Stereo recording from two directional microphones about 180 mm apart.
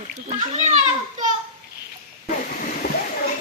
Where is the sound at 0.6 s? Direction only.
40° right (ahead or behind).